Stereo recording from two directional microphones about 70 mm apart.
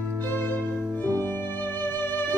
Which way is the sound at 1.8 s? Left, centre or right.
Left.